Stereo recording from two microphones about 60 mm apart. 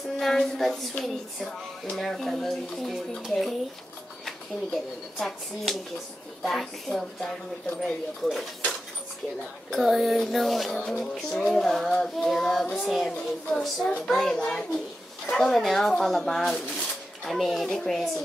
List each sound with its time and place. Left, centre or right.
0.2 s a woman's voice: centre
5.2 s a woman's voice: centre
9.7 s a woman's voice: centre